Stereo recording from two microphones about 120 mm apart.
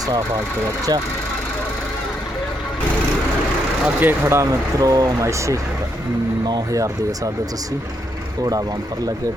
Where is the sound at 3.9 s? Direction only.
15° right (ahead or behind).